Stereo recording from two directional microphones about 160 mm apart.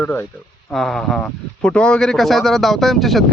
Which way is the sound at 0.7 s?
Centre (ahead or behind).